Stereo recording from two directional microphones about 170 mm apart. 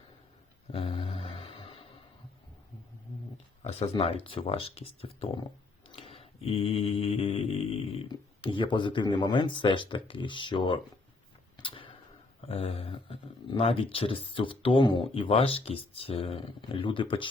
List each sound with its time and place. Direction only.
0.7 s music: 35° left (ahead or behind)
3.6 s speech: 35° left (ahead or behind)
5.9 s mantra: 35° left (ahead or behind)
8.1 s speech: 30° left (ahead or behind)
11.5 s tick-tock: 30° left (ahead or behind)
12.4 s speech: 35° left (ahead or behind)